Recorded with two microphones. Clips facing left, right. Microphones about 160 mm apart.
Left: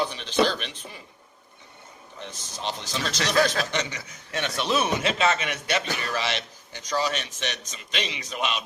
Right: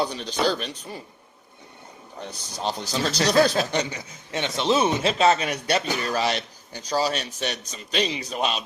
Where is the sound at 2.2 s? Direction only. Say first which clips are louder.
Right 4 dB; 40° right (ahead or behind).